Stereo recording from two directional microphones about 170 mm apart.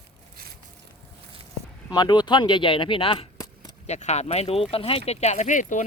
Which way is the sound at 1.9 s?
25° left (ahead or behind).